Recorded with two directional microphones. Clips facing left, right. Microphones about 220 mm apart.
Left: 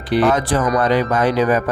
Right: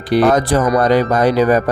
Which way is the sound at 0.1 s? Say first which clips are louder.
Right 3 dB; 40° right (ahead or behind).